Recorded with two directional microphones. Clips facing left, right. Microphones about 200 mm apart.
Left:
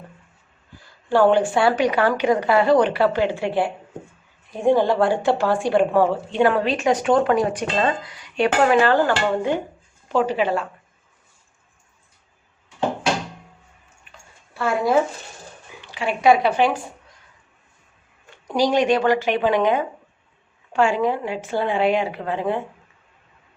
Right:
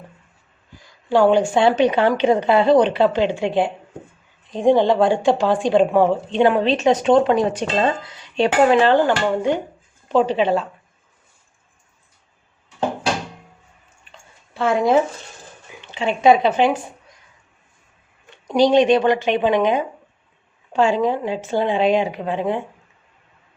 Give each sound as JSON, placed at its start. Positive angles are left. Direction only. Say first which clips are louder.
{"t": 0.8, "sound": "a woman's voice", "louder": "right 1 dB", "side_deg": -15}
{"t": 14.5, "sound": "a woman's voice", "louder": "right 3 dB", "side_deg": -20}
{"t": 18.3, "sound": "a woman's voice", "louder": "right 5 dB", "side_deg": -20}